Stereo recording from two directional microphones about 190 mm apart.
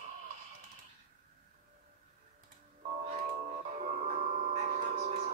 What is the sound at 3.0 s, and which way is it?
Music, 35° right (ahead or behind).